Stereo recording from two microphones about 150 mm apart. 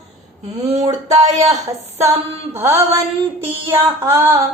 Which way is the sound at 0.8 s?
45° right (ahead or behind).